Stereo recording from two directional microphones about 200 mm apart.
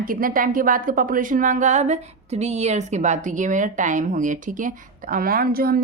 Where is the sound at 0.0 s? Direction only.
45° right (ahead or behind).